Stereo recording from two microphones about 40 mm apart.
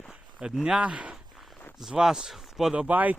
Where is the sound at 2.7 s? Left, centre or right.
Right.